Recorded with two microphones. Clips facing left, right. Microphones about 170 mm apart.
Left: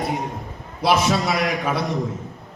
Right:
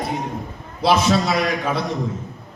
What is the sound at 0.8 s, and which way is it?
Speech, 10° left (ahead or behind).